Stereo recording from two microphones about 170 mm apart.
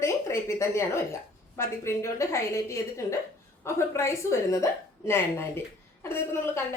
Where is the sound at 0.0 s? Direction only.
15° left (ahead or behind).